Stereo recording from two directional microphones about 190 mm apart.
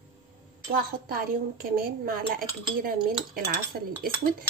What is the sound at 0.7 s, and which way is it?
Speech, 50° right (ahead or behind).